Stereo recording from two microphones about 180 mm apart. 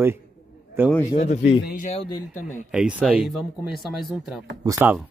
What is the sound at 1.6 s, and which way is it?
Speech, 50° left (ahead or behind).